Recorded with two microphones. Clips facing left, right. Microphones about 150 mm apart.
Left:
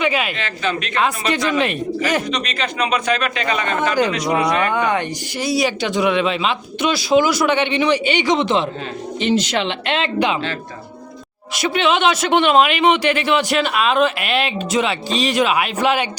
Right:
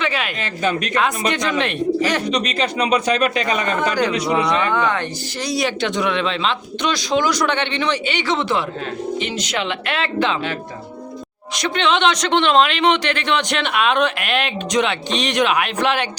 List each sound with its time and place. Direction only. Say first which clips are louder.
0.0 s speech: left 3 dB; 10° left (ahead or behind)
0.3 s speech: right 2 dB; 40° right (ahead or behind)
1.3 s speech: left 2 dB; 5° left (ahead or behind)
2.3 s speech: right 3 dB; 35° right (ahead or behind)
3.9 s speech: left 2 dB; 10° left (ahead or behind)
11.5 s speech: left 1 dB; 10° left (ahead or behind)